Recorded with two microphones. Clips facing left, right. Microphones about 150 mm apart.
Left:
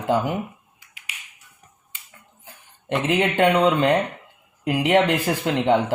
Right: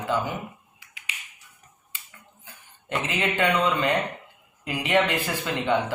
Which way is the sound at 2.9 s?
70° left (ahead or behind).